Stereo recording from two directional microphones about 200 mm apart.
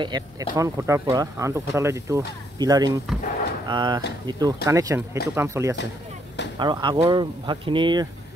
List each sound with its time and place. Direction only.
0.0 s speech: 20° right (ahead or behind)